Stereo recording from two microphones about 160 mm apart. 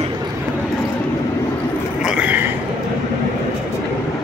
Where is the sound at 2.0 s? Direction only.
10° right (ahead or behind).